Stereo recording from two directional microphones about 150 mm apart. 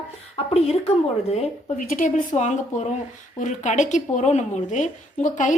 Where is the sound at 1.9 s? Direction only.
65° left (ahead or behind).